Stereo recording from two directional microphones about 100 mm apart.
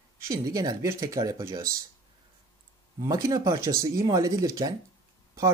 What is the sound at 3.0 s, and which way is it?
Speech, 35° right (ahead or behind).